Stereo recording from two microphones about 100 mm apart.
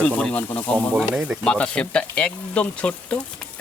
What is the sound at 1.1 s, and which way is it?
Speech, 10° right (ahead or behind).